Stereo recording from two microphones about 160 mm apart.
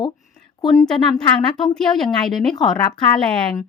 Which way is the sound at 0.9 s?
5° left (ahead or behind).